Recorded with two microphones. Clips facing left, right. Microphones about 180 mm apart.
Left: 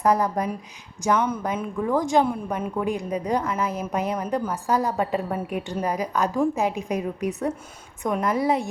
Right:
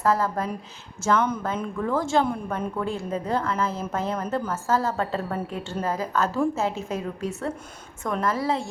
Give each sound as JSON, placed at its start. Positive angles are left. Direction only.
{"t": 0.0, "sound": "a woman's voice", "side_deg": 20}